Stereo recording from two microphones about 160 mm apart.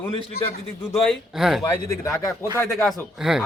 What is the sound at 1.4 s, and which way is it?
Speech, centre (ahead or behind).